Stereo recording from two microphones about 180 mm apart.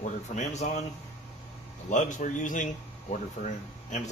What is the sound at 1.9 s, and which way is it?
A man's voice, 45° left (ahead or behind).